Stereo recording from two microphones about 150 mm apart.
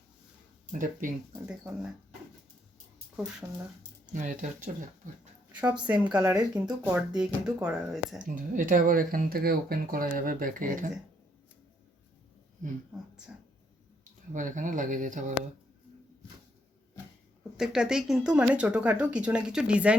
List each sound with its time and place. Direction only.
0.7 s speech: 60° right (ahead or behind)
1.5 s speech: 5° right (ahead or behind)
3.4 s speech: 15° right (ahead or behind)
4.1 s speech: 60° right (ahead or behind)
6.1 s speech: 10° right (ahead or behind)
8.2 s speech: 65° right (ahead or behind)
14.3 s speech: 55° right (ahead or behind)
17.6 s speech: 5° right (ahead or behind)